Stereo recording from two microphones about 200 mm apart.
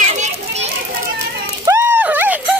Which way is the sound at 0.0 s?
35° right (ahead or behind).